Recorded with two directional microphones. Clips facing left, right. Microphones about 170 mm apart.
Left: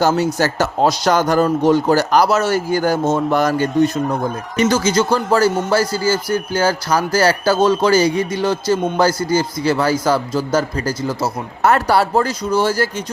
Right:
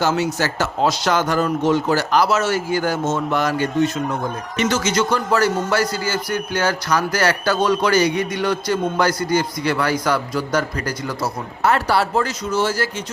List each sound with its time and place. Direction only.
0.0 s a man's voice: 40° left (ahead or behind)
11.6 s speech: 45° left (ahead or behind)